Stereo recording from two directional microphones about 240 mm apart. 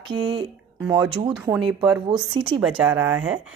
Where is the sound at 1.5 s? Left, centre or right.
Centre.